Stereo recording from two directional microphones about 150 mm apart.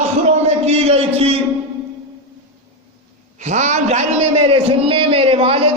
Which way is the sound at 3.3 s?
50° right (ahead or behind).